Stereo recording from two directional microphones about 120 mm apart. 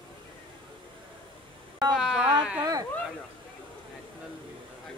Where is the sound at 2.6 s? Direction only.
30° right (ahead or behind).